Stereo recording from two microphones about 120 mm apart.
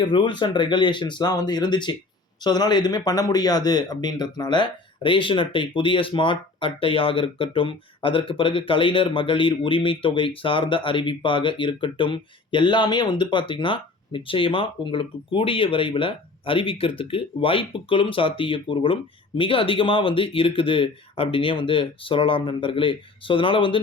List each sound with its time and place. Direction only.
0.0 s speech: 40° left (ahead or behind)